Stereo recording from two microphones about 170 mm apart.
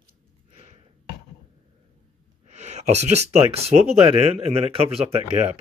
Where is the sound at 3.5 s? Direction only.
35° right (ahead or behind).